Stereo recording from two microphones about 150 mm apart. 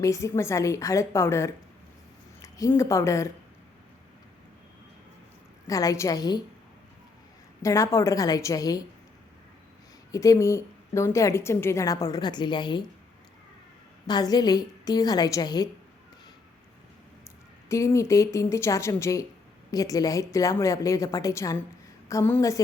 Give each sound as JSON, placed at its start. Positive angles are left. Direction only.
{"t": 0.0, "sound": "a woman's voice", "side_deg": 20}
{"t": 5.6, "sound": "a woman's voice", "side_deg": 25}
{"t": 7.6, "sound": "a woman's voice", "side_deg": 20}
{"t": 10.1, "sound": "a woman's voice", "side_deg": 20}
{"t": 14.1, "sound": "a woman's voice", "side_deg": 25}
{"t": 17.7, "sound": "a woman's voice", "side_deg": 20}
{"t": 22.1, "sound": "a woman's voice", "side_deg": 10}
{"t": 22.4, "sound": "a woman's voice", "side_deg": 25}